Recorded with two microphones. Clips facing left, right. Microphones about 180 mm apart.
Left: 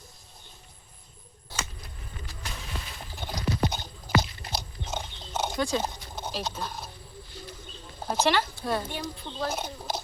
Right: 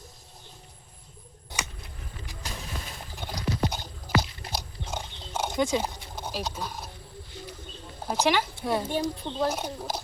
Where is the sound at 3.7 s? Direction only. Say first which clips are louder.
Left 1 dB; 10° right (ahead or behind).